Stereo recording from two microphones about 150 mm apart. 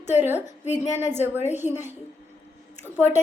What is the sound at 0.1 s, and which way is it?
A woman's voice, 15° right (ahead or behind).